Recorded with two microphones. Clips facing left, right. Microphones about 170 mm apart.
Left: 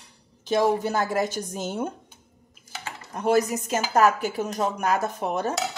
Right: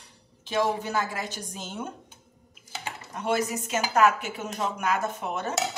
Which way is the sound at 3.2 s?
40° left (ahead or behind).